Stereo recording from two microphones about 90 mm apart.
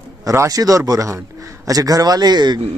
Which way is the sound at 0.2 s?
40° right (ahead or behind).